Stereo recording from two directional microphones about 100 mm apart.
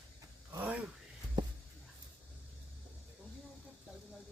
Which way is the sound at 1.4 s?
45° right (ahead or behind).